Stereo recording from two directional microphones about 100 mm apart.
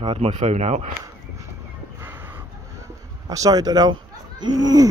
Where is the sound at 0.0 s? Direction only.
85° right.